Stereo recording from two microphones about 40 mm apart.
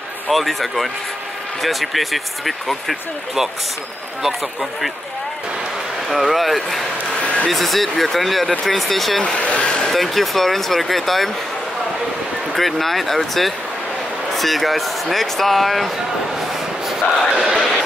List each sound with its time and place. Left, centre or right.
0.3 s speech: centre
6.0 s speech: centre
7.2 s a sound: left
7.4 s speech: centre
9.2 s speech: left
9.9 s speech: centre
12.5 s speech: centre
17.3 s speech: centre
17.6 s a sound: centre